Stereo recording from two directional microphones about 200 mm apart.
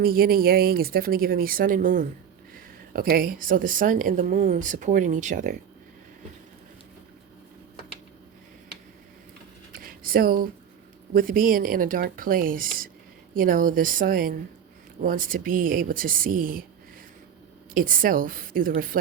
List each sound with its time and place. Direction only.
0.0 s speech: 50° right (ahead or behind)
9.7 s a sound: 45° right (ahead or behind)
11.1 s speech: 45° right (ahead or behind)
17.7 s speech: 45° right (ahead or behind)